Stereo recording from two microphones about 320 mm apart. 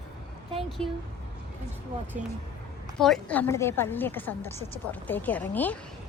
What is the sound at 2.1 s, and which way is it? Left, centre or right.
Speech, right.